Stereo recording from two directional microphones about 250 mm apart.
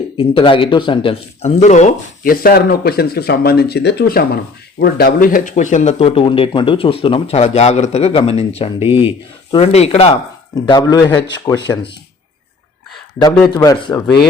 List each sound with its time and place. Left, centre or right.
0.2 s speech: left
13.5 s speech: centre